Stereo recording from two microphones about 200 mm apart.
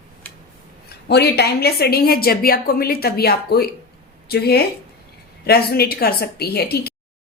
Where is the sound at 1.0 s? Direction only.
55° left (ahead or behind).